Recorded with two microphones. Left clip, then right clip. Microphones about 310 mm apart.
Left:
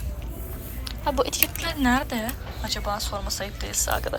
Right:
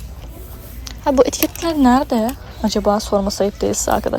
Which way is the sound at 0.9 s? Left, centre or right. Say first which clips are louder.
Right 10 dB; right.